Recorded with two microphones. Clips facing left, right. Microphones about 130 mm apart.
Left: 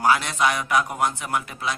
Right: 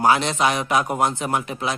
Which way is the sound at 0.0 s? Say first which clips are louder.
Right 2 dB; 25° right (ahead or behind).